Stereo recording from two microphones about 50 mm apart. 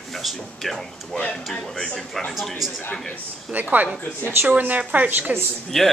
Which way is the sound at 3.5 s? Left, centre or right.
Right.